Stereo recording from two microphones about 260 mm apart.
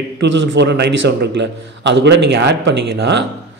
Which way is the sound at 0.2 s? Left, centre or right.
Right.